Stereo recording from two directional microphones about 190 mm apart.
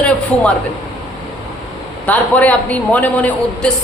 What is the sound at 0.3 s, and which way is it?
Speech, 5° left (ahead or behind).